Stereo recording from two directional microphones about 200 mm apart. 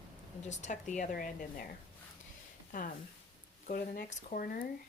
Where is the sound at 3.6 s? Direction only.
40° left (ahead or behind).